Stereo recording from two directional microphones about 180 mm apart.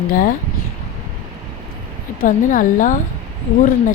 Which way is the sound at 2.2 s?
45° left (ahead or behind).